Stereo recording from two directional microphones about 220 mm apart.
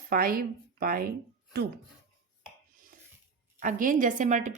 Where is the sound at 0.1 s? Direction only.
40° right (ahead or behind).